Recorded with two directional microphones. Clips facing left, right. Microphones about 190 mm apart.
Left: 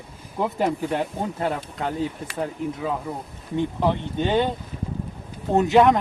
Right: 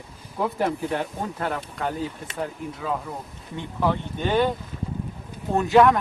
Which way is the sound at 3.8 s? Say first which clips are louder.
Right 2 dB; 20° left (ahead or behind).